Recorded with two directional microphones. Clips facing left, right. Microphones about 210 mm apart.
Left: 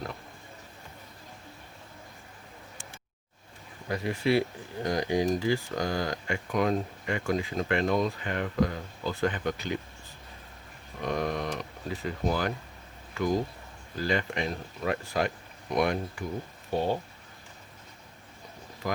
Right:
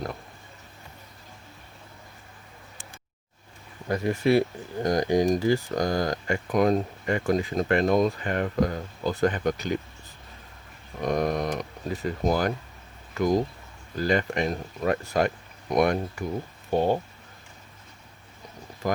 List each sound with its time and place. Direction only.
3.8 s speech: 45° right (ahead or behind)
11.0 s a sound: 45° right (ahead or behind)
13.9 s speech: 45° right (ahead or behind)